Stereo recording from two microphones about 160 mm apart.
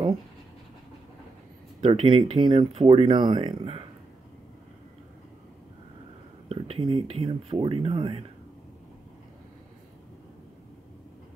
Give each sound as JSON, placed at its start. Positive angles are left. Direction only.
{"t": 1.8, "sound": "speech", "side_deg": -35}
{"t": 6.5, "sound": "speech", "side_deg": -35}